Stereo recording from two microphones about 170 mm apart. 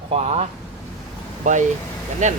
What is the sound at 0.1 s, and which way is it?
Speech, 35° right (ahead or behind).